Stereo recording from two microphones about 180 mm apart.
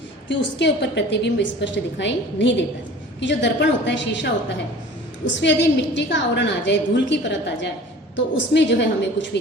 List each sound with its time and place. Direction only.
0.3 s a woman's voice: 75° left (ahead or behind)
5.3 s a woman's voice: 85° left